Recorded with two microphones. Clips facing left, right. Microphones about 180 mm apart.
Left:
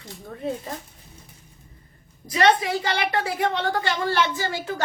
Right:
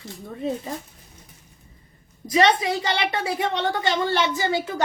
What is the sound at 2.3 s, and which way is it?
A woman's voice, 25° right (ahead or behind).